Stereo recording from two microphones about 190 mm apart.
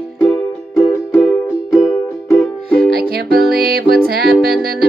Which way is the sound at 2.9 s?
55° right (ahead or behind).